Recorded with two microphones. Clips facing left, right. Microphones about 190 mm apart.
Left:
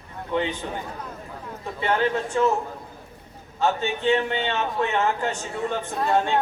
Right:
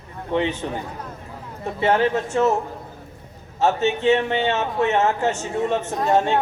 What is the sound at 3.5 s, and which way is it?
A man's voice, 25° right (ahead or behind).